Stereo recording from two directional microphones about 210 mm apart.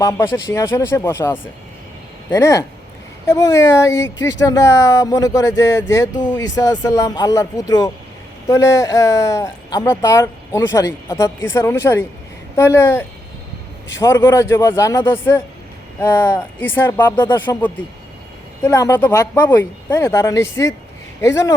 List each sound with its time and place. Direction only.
0.0 s speech: 15° left (ahead or behind)